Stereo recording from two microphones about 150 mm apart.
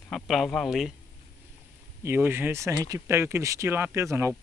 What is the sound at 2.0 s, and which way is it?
Speech, 15° right (ahead or behind).